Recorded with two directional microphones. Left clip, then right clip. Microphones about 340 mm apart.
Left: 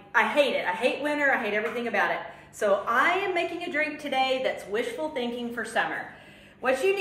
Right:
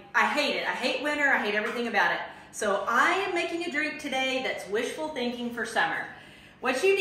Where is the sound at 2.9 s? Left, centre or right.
Centre.